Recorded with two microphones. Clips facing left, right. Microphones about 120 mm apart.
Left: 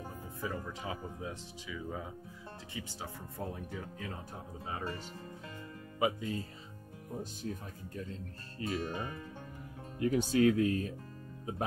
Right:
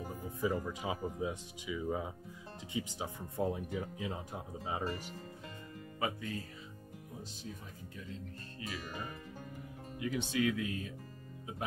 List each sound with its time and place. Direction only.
0.0 s speech: 15° right (ahead or behind)
5.9 s speech: 20° left (ahead or behind)
7.4 s speech: 45° left (ahead or behind)
9.9 s speech: 40° left (ahead or behind)